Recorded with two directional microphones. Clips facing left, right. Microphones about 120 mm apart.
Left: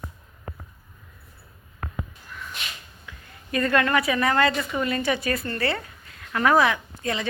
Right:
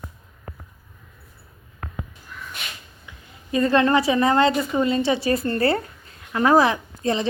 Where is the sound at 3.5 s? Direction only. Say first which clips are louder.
Right 4 dB; 25° right (ahead or behind).